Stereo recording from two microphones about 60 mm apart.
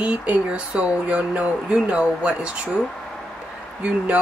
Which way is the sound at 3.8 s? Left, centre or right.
Right.